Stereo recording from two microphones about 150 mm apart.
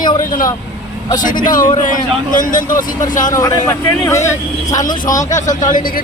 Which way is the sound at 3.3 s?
25° left (ahead or behind).